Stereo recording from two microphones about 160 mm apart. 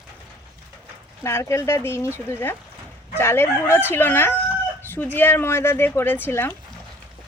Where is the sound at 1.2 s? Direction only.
15° left (ahead or behind).